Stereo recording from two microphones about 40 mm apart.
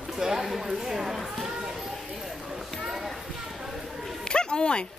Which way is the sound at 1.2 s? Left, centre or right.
Centre.